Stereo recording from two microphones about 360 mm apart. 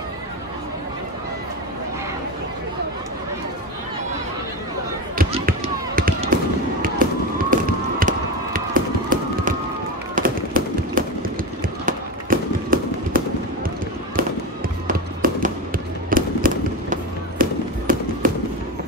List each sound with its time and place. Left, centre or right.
5.1 s fireworks: right
8.5 s a sound: right
11.8 s fireworks: right
14.9 s fireworks: right